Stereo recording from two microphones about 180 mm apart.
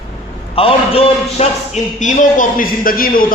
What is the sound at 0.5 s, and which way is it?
A man's voice, 30° left (ahead or behind).